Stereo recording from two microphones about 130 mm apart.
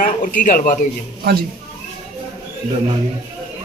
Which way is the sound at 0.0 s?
90° left.